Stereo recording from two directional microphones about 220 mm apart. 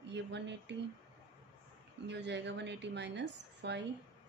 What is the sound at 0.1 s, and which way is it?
Speech, 55° right (ahead or behind).